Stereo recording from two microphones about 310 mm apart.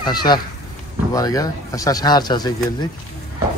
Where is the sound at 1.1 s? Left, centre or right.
Centre.